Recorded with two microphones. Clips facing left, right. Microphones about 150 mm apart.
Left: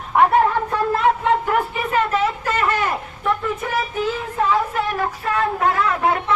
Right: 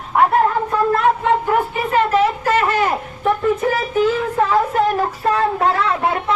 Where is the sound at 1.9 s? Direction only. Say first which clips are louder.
Right 5 dB; 35° right (ahead or behind).